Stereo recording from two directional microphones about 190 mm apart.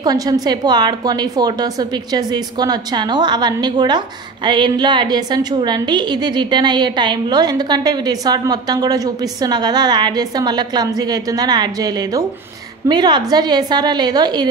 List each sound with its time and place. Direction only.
0.0 s a woman's voice: 20° right (ahead or behind)